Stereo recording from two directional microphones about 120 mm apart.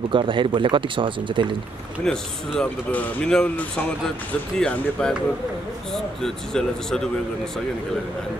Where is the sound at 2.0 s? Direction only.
5° left (ahead or behind).